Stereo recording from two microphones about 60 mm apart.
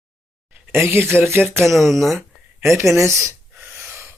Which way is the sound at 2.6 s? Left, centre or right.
Right.